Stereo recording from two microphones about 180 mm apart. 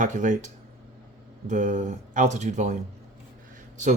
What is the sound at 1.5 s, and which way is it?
Speech, 45° right (ahead or behind).